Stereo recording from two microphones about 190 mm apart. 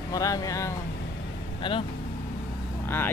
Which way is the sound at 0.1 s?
20° left (ahead or behind).